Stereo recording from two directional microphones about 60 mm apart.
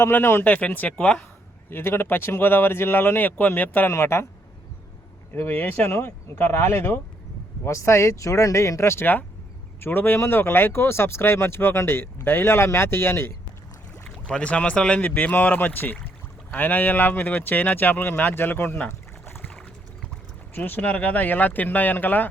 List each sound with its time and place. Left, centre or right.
0.0 s speech: left
0.4 s speech: left
1.7 s speech: left
3.8 s speech: left
5.3 s speech: left
7.6 s speech: left
9.8 s speech: left
14.0 s speech: centre
15.0 s speech: left
18.9 s boat: left
20.6 s speech: left